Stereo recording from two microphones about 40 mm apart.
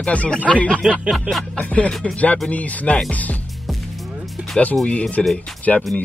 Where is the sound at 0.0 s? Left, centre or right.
Left.